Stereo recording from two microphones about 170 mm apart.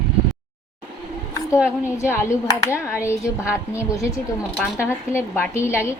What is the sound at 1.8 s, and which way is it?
A woman's voice, 15° left (ahead or behind).